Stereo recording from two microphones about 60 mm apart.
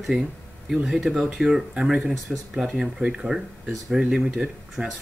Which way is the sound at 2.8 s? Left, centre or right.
Centre.